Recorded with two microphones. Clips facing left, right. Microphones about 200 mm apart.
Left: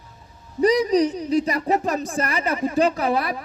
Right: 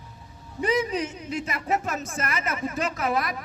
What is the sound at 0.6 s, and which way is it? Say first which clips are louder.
Speech: left 8 dB; 35° left (ahead or behind).